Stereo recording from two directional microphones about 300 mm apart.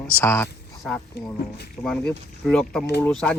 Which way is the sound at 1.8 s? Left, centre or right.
Centre.